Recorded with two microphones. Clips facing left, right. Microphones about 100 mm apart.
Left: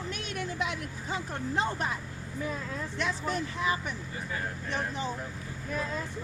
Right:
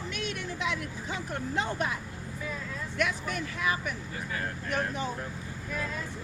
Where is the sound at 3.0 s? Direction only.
30° left (ahead or behind).